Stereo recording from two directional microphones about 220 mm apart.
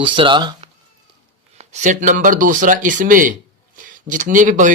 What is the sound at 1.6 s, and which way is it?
Speech, 30° right (ahead or behind).